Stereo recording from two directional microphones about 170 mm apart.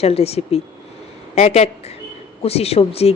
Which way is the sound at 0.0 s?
35° left (ahead or behind).